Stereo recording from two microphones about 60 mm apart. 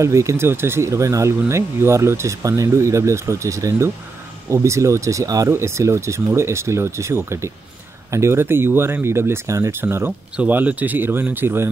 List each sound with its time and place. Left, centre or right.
0.0 s speech: right
0.5 s speech: right
2.4 s speech: right
5.5 s speech: right
10.5 s speech: right